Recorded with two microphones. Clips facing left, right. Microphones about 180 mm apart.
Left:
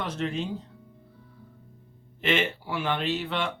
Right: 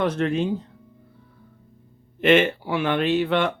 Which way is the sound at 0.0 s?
55° right (ahead or behind).